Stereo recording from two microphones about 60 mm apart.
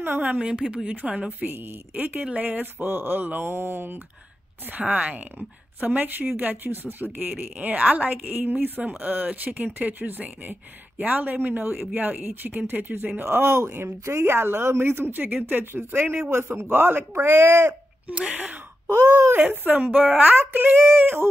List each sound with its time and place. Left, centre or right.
0.0 s speech: right
1.4 s speech: right
4.6 s speech: right
13.2 s speech: right
13.7 s speech: right
14.0 s speech: right
18.0 s speech: right
18.9 s speech: right
19.5 s speech: right
20.9 s speech: right